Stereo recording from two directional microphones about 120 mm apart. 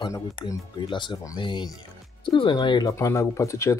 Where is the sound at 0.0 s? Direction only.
30° left (ahead or behind).